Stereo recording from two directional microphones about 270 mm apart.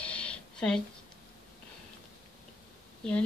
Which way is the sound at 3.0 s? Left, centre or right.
Centre.